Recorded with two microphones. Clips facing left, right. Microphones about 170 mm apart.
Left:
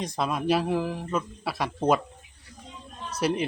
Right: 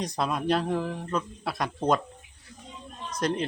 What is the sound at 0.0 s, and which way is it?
Speech, centre (ahead or behind).